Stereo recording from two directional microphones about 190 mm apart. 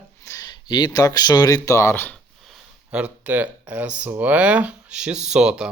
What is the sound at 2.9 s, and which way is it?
Speech, 10° right (ahead or behind).